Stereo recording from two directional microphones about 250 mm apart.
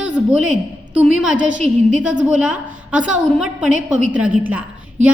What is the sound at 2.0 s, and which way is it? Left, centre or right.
A woman's voice, centre.